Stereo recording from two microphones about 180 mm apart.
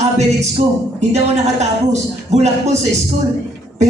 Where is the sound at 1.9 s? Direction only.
40° right (ahead or behind).